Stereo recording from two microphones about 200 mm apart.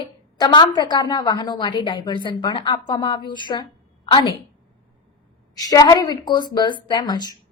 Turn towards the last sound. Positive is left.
turn(degrees=20)  # may be behind; listen again after turning